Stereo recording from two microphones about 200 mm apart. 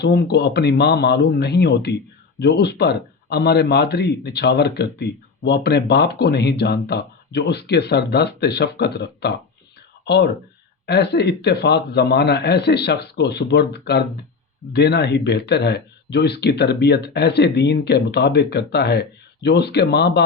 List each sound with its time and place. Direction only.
0.0 s speech: 55° left (ahead or behind)
10.8 s speech: 55° left (ahead or behind)